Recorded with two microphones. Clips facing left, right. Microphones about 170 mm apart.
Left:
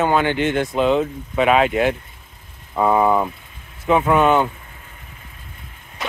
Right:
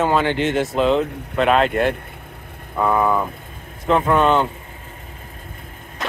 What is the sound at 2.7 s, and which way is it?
Speech, 15° left (ahead or behind).